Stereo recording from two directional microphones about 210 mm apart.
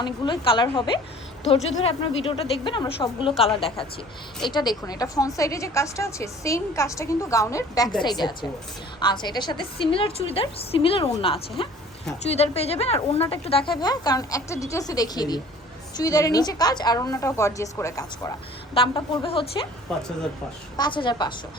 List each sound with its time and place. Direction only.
0.0 s speech: 20° left (ahead or behind)
4.4 s a woman's voice: 20° left (ahead or behind)
19.9 s speech: 5° left (ahead or behind)
20.7 s speech: 20° left (ahead or behind)